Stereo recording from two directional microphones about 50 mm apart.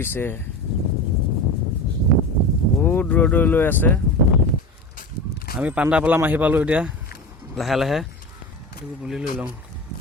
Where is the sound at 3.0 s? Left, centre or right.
Left.